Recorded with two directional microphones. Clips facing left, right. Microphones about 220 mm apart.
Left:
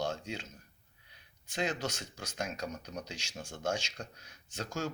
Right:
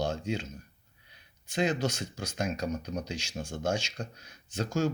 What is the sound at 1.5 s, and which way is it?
Speech, 10° right (ahead or behind).